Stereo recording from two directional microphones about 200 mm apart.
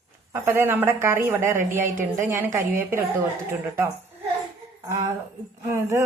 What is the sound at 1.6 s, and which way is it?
Speech, 40° right (ahead or behind).